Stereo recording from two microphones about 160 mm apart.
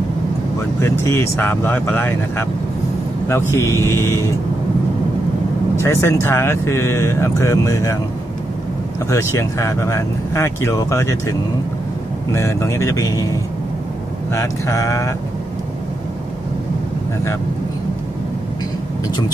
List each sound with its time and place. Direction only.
0.7 s speech: 15° left (ahead or behind)
5.8 s speech: 15° left (ahead or behind)
9.1 s speech: 20° left (ahead or behind)
14.3 s speech: 20° left (ahead or behind)